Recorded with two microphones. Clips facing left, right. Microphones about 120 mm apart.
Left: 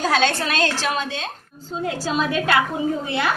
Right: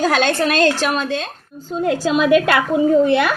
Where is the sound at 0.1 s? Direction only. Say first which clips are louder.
Right 4 dB; 60° right (ahead or behind).